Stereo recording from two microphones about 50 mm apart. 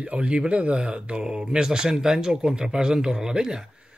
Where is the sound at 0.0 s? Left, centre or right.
Right.